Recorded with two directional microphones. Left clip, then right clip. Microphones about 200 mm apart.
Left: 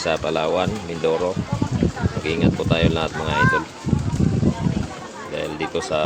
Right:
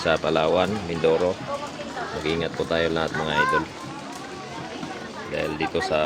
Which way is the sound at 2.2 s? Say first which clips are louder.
Left 4 dB; centre (ahead or behind).